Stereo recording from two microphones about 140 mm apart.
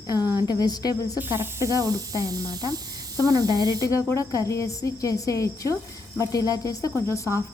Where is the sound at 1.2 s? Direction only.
15° right (ahead or behind).